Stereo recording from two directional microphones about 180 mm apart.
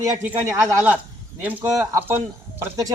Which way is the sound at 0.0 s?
15° right (ahead or behind).